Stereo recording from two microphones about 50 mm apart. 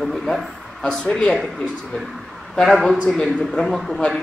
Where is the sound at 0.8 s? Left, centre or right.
Centre.